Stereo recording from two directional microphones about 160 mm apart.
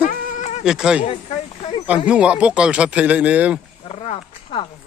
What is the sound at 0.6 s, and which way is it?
Speech, 5° right (ahead or behind).